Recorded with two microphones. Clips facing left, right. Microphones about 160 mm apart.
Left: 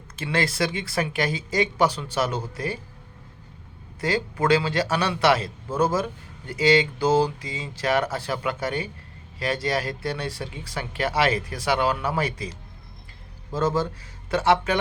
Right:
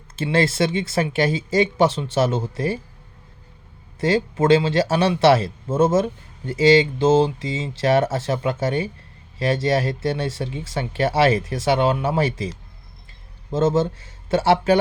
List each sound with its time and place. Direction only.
0.2 s speech: 30° right (ahead or behind)
4.0 s speech: 25° right (ahead or behind)